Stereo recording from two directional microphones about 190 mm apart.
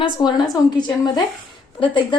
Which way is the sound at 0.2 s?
20° left (ahead or behind).